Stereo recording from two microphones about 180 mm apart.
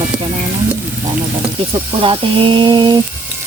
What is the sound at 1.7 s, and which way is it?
Speech, 30° right (ahead or behind).